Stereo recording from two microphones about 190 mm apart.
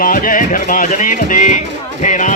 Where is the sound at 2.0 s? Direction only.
40° left (ahead or behind).